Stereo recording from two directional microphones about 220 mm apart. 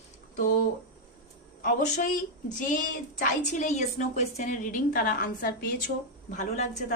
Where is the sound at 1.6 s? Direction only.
35° left (ahead or behind).